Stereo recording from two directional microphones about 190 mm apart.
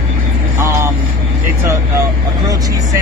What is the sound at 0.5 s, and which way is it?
Vehicle, 15° right (ahead or behind).